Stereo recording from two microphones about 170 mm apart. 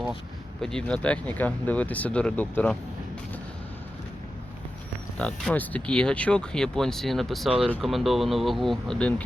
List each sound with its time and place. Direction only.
0.6 s speech: 5° left (ahead or behind)
5.2 s speech: 5° left (ahead or behind)